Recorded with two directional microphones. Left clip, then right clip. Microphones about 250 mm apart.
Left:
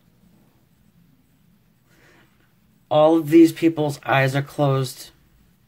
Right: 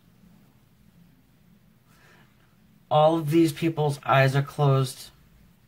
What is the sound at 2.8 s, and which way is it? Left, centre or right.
Speech, left.